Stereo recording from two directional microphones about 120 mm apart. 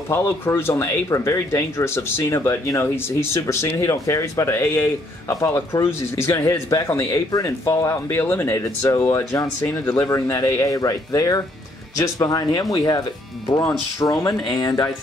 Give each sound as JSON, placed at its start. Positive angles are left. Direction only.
{"t": 0.1, "sound": "speech", "side_deg": 20}
{"t": 14.4, "sound": "speech", "side_deg": 40}